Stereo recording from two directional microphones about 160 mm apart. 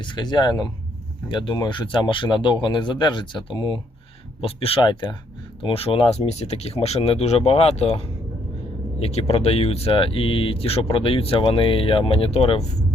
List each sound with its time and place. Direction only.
0.0 s speech: 30° left (ahead or behind)